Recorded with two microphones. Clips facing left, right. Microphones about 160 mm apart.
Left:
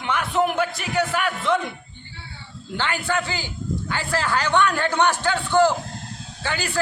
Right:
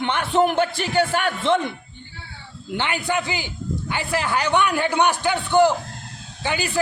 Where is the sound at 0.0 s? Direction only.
30° right (ahead or behind).